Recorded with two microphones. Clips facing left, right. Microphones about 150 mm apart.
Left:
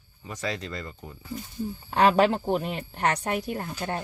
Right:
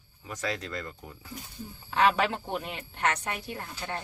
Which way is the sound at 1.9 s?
40° left (ahead or behind).